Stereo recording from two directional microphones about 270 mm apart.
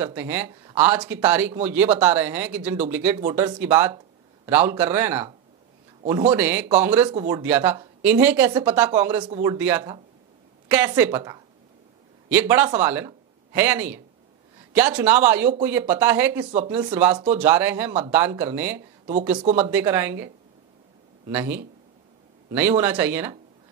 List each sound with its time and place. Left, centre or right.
0.0 s speech: centre
6.0 s speech: centre
6.3 s speech: centre
8.5 s speech: centre
8.8 s speech: centre
16.5 s speech: centre
17.3 s speech: centre
21.3 s speech: centre